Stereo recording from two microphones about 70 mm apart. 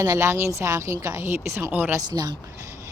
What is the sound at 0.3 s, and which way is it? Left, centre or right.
Speech, right.